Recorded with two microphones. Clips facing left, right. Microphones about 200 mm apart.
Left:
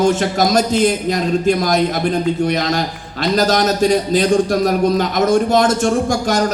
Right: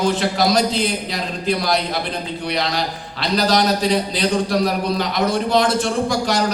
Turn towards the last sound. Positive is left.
turn(degrees=45)  # may be behind; listen again after turning